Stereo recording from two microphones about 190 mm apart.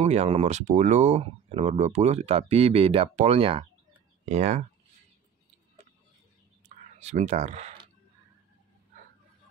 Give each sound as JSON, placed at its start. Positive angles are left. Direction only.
{"t": 0.0, "sound": "speech", "side_deg": -35}
{"t": 7.0, "sound": "speech", "side_deg": -35}